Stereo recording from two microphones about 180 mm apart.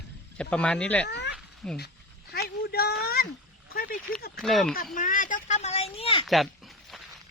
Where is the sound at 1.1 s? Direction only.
70° left (ahead or behind).